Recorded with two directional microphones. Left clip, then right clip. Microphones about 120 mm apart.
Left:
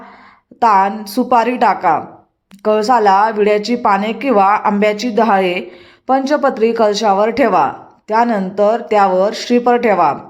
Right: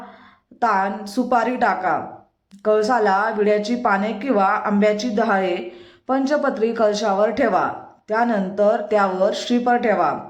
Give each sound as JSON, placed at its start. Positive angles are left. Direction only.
{"t": 0.6, "sound": "speech", "side_deg": 35}